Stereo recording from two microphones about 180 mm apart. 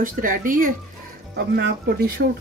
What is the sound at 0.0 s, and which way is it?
Speech, 50° right (ahead or behind).